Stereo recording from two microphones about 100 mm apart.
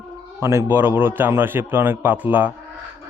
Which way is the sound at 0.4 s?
25° right (ahead or behind).